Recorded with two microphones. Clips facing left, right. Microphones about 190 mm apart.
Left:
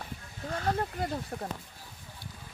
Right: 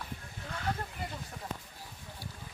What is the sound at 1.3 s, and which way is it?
Speech, 45° left (ahead or behind).